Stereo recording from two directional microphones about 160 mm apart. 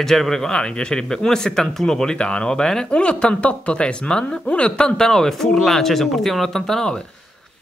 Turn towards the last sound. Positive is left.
turn(degrees=0)  # may be behind; listen again after turning